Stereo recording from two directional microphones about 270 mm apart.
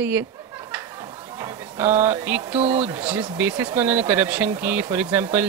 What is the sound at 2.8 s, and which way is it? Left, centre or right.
Speech, centre.